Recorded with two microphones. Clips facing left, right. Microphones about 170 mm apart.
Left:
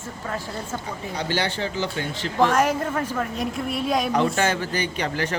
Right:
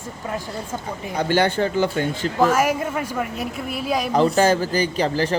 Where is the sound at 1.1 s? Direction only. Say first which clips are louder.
Right 7 dB; 50° right (ahead or behind).